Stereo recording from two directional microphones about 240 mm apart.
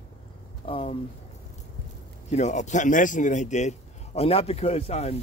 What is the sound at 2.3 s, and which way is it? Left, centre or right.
A man's voice, left.